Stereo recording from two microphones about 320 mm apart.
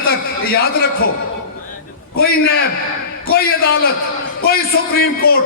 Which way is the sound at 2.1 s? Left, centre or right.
Left.